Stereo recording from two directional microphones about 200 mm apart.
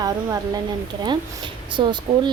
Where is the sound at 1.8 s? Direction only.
25° right (ahead or behind).